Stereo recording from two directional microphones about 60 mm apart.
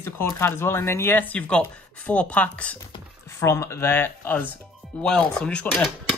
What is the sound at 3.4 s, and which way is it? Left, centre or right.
Speech, left.